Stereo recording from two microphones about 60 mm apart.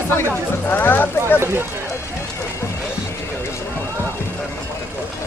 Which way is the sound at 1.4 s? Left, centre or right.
Right.